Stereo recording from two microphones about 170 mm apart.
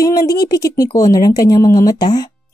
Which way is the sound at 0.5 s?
20° left (ahead or behind).